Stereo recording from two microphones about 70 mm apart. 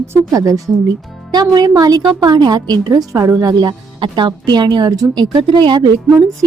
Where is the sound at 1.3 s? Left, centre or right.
Right.